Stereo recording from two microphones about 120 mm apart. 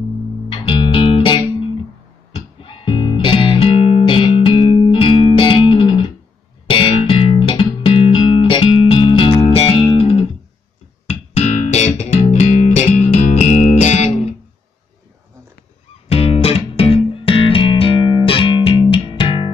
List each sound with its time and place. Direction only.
0.5 s music: 45° left (ahead or behind); by 14.3 s 60° left (ahead or behind)
16.1 s music: 55° left (ahead or behind)